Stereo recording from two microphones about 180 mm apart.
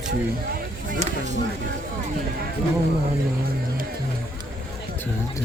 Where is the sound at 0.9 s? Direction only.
40° right (ahead or behind).